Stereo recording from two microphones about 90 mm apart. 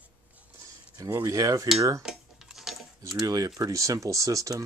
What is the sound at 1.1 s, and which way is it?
Speech, 35° right (ahead or behind).